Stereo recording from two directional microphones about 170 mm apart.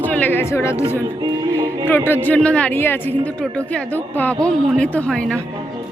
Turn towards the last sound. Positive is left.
turn(degrees=5)  # may be behind; listen again after turning